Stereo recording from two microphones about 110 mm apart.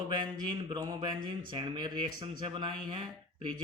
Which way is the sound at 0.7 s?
45° right (ahead or behind).